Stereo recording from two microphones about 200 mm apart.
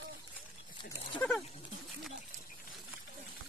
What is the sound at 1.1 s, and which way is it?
Speech, 5° left (ahead or behind).